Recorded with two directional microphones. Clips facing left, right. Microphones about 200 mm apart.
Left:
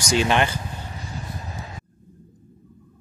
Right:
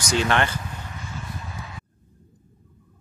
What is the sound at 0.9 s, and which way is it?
Vehicle, 35° left (ahead or behind).